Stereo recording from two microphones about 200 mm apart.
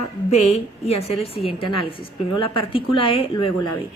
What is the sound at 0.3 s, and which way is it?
A woman's voice, 30° left (ahead or behind).